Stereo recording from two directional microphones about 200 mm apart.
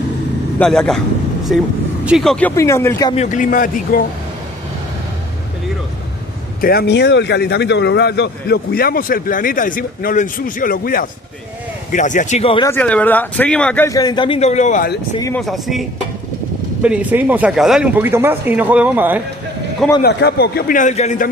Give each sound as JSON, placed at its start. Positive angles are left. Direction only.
{"t": 0.6, "sound": "speech", "side_deg": 5}
{"t": 3.1, "sound": "a man's voice", "side_deg": 35}
{"t": 6.6, "sound": "a man's voice", "side_deg": 50}
{"t": 12.6, "sound": "speech", "side_deg": 10}
{"t": 15.3, "sound": "speech", "side_deg": 0}
{"t": 16.8, "sound": "speech", "side_deg": -5}
{"t": 20.0, "sound": "speech", "side_deg": 55}